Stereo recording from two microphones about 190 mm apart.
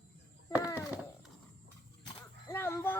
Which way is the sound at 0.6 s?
20° left (ahead or behind).